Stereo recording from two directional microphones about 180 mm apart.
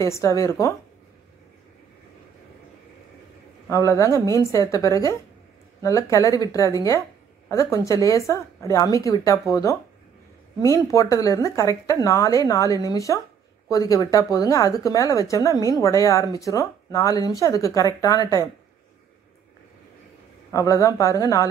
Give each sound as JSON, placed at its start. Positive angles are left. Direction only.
{"t": 0.0, "sound": "a woman's voice", "side_deg": 15}
{"t": 3.6, "sound": "a woman's voice", "side_deg": 15}
{"t": 20.5, "sound": "a woman's voice", "side_deg": 15}